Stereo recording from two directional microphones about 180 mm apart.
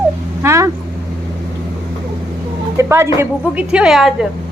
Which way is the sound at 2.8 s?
15° right (ahead or behind).